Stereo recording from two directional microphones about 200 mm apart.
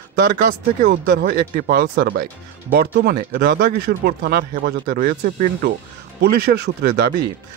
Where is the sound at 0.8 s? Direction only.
50° right (ahead or behind).